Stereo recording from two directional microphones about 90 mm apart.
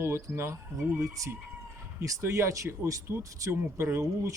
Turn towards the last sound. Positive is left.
turn(degrees=-30)  # may be behind; listen again after turning